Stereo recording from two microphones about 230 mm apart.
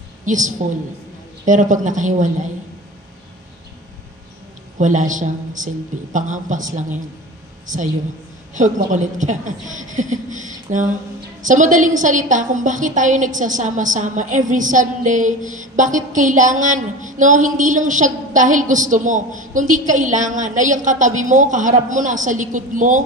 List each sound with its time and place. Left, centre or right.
0.2 s a woman's voice: right
4.7 s a woman's voice: right